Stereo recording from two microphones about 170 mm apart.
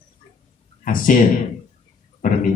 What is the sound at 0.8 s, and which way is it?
Speech, 50° left (ahead or behind).